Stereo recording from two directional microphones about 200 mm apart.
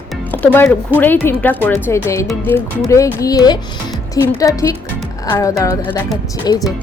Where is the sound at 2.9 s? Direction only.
15° left (ahead or behind).